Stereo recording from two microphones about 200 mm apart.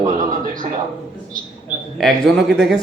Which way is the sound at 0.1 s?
45° right (ahead or behind).